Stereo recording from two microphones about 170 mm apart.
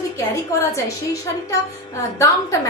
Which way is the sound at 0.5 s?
20° left (ahead or behind).